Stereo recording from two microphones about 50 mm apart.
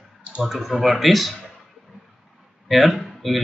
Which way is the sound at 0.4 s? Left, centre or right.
Centre.